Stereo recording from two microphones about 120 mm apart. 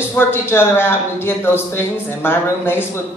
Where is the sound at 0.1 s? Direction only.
20° left (ahead or behind).